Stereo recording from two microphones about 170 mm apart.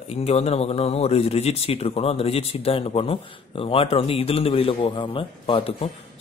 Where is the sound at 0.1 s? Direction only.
35° left (ahead or behind).